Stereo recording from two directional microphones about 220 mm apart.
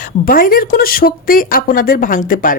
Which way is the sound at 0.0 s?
40° left (ahead or behind).